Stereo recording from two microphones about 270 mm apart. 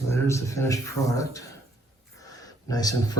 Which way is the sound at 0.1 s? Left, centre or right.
Centre.